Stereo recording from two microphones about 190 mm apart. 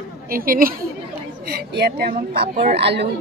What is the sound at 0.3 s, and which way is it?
A woman's voice, 50° right (ahead or behind).